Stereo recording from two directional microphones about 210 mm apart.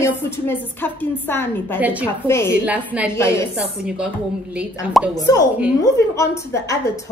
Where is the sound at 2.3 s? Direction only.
10° left (ahead or behind).